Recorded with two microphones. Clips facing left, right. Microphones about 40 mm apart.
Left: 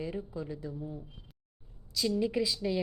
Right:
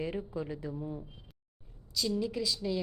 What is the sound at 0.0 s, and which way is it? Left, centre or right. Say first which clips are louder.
A woman's voice: right 2 dB; right.